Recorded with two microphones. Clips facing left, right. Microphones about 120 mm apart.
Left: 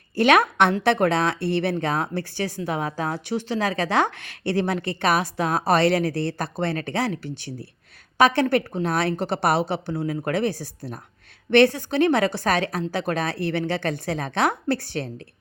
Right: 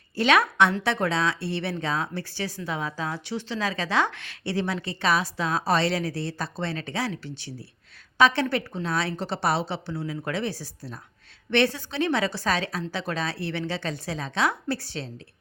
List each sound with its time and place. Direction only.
0.2 s a woman's voice: 50° left (ahead or behind)